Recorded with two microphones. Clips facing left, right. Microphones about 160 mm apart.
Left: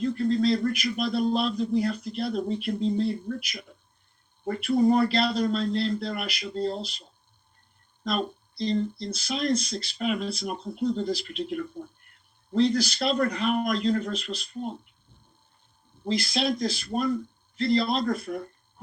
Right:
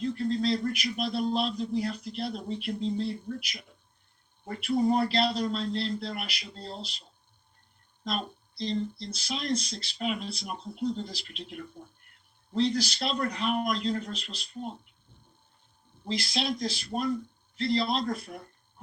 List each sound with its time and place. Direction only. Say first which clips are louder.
0.0 s speech: left 4 dB; 50° left (ahead or behind)
8.0 s speech: left 5 dB; 50° left (ahead or behind)
16.0 s speech: left 5 dB; 50° left (ahead or behind)